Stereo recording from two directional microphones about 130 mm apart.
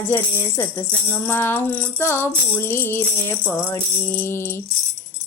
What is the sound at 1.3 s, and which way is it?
Music, 15° left (ahead or behind).